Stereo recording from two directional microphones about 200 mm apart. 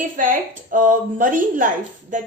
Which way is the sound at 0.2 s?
40° right (ahead or behind).